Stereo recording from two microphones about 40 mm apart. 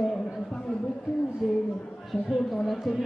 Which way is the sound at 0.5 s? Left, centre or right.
Left.